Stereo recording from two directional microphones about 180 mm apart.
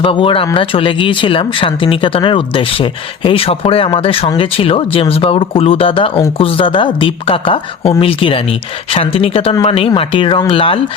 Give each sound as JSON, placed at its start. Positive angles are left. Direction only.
{"t": 0.0, "sound": "speech", "side_deg": 30}